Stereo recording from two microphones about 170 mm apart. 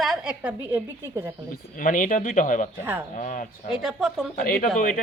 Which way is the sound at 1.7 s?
55° left (ahead or behind).